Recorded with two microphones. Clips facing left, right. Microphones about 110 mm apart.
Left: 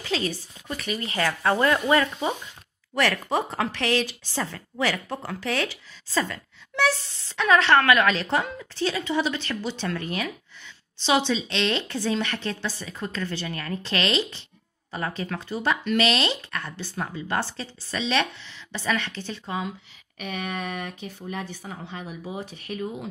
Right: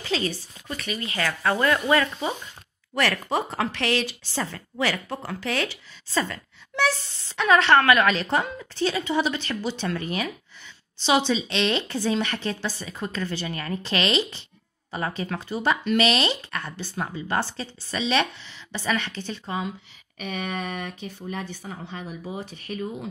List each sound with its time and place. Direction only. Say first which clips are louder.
0.0 s speech: right 1 dB; centre (ahead or behind)
2.9 s a woman's voice: even; centre (ahead or behind)